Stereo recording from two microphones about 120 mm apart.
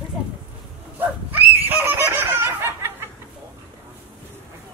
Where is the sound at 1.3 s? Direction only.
15° right (ahead or behind).